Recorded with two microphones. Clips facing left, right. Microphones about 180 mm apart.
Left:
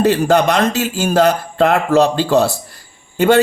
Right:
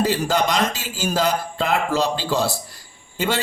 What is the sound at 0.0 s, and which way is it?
A man's voice, 60° left (ahead or behind).